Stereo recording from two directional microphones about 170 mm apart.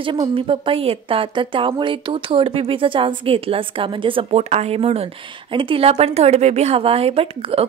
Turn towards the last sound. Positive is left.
turn(degrees=-35)  # may be behind; listen again after turning